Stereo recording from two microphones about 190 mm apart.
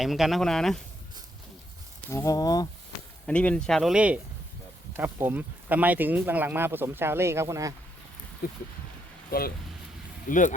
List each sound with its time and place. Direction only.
0.0 s speech: centre (ahead or behind)
2.0 s speech: 15° left (ahead or behind)
3.2 s speech: 5° left (ahead or behind); by 7.7 s 15° right (ahead or behind)
8.4 s speech: 50° left (ahead or behind)
10.2 s speech: 40° left (ahead or behind)